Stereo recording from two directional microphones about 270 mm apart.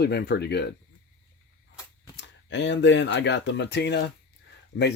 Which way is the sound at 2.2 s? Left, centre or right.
Left.